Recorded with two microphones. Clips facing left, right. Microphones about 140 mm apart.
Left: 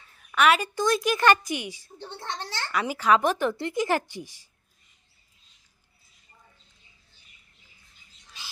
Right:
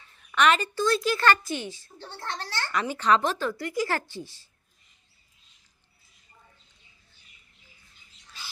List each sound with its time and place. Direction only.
0.2 s a woman's voice: 5° left (ahead or behind)
2.8 s a woman's voice: 10° left (ahead or behind)